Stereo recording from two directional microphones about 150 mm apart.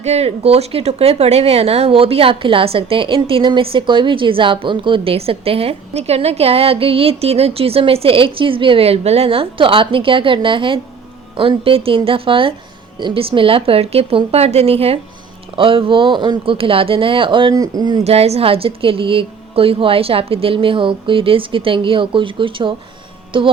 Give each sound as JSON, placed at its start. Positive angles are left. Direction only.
{"t": 0.0, "sound": "speech", "side_deg": -45}
{"t": 18.0, "sound": "speech", "side_deg": -45}